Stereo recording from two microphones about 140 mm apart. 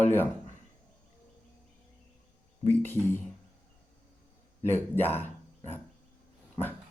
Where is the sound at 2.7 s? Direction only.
15° left (ahead or behind).